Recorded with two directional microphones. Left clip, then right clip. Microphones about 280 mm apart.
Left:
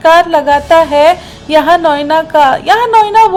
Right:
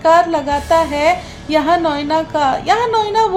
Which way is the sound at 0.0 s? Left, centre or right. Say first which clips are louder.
Left 5 dB; centre.